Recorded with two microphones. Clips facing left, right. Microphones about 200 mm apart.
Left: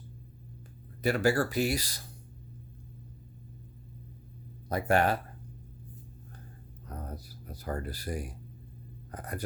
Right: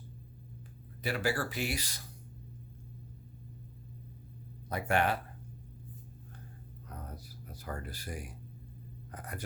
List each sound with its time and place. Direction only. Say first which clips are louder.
1.0 s speech: left 7 dB; 45° left (ahead or behind)
4.7 s speech: left 4 dB; 40° left (ahead or behind)
6.8 s a sound: left 5 dB; 40° left (ahead or behind)
9.1 s speech: left 5 dB; 35° left (ahead or behind)